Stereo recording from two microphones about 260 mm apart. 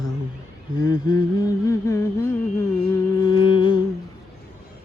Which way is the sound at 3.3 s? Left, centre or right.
Centre.